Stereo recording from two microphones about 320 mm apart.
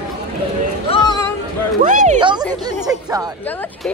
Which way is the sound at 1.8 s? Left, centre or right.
Right.